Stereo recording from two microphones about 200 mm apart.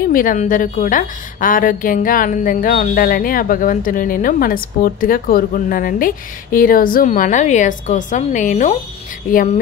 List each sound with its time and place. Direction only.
0.1 s a woman's voice: 45° left (ahead or behind)